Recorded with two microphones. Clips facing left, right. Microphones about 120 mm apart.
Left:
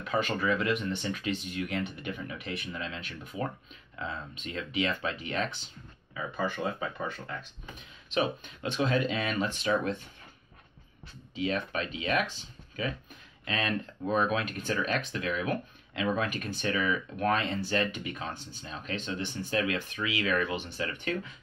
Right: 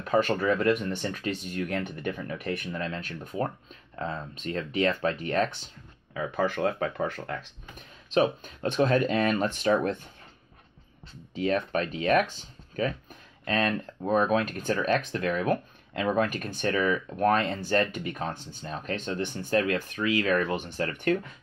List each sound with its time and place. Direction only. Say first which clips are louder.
0.0 s speech: right 5 dB; 40° right (ahead or behind)
6.1 s speech: right 5 dB; 70° right (ahead or behind)
8.1 s speech: right 6 dB; 40° right (ahead or behind)
11.3 s speech: right 5 dB; 45° right (ahead or behind)